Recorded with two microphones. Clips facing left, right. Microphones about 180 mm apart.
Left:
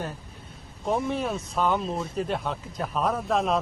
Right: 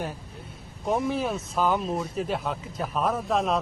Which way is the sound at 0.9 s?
Centre (ahead or behind).